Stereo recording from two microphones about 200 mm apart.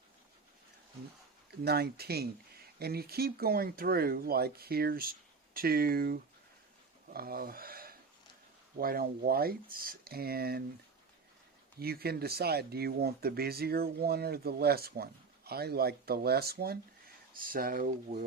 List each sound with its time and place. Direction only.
1.6 s speech: 50° right (ahead or behind)
11.8 s speech: 50° right (ahead or behind)